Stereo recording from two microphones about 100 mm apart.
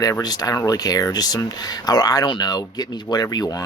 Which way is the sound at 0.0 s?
40° left (ahead or behind).